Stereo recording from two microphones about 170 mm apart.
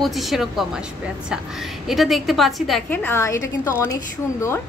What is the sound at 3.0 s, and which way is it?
A woman's voice, 15° left (ahead or behind).